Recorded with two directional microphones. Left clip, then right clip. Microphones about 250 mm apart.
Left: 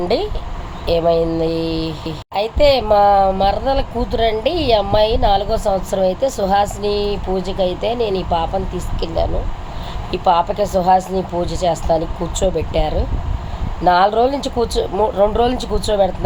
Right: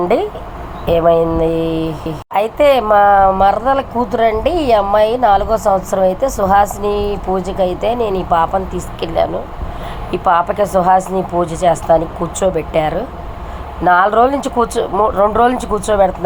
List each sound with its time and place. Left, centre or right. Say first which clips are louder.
0.9 s speech: right 4 dB; centre
1.7 s mantra: right 4 dB; right
2.3 s speech: right 3 dB; centre
10.1 s speech: right 2 dB; centre